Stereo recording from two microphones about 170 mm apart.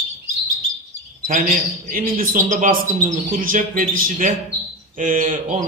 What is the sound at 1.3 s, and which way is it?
Speech, 55° right (ahead or behind).